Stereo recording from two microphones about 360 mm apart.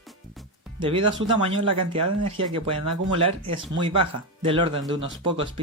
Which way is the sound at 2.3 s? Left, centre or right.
Centre.